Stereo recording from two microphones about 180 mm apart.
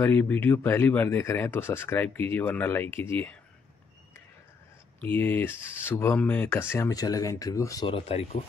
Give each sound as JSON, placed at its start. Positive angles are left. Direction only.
{"t": 0.0, "sound": "speech", "side_deg": 10}
{"t": 5.0, "sound": "speech", "side_deg": 10}
{"t": 7.9, "sound": "speech", "side_deg": 35}